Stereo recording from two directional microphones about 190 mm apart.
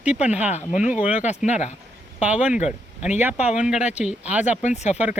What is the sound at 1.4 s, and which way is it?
Speech, 35° left (ahead or behind).